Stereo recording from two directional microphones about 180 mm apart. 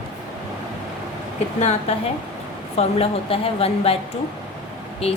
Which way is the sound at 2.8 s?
30° left (ahead or behind).